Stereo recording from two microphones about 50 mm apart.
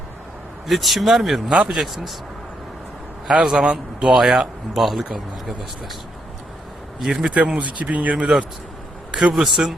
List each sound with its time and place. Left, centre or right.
0.7 s speech: centre
3.2 s a man's voice: centre
5.0 s speech: centre
7.2 s speech: right
9.1 s a man's voice: centre